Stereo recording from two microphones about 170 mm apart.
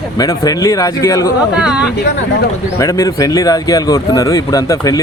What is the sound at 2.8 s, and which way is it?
A man's voice, 20° left (ahead or behind).